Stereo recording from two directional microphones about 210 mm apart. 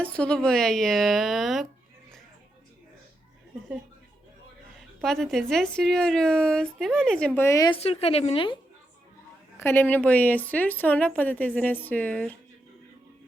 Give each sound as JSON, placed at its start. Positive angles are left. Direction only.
{"t": 0.0, "sound": "speech", "side_deg": 5}
{"t": 4.9, "sound": "speech", "side_deg": 0}
{"t": 7.8, "sound": "a woman's voice", "side_deg": 30}
{"t": 9.6, "sound": "speech", "side_deg": 10}